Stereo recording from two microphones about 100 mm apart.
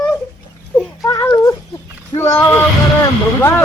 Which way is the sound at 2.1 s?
30° left (ahead or behind).